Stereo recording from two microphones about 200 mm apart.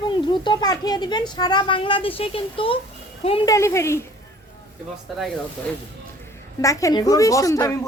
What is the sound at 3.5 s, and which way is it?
Speech, 15° left (ahead or behind).